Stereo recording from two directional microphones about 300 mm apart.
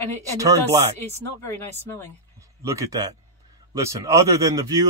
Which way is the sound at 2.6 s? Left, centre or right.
Centre.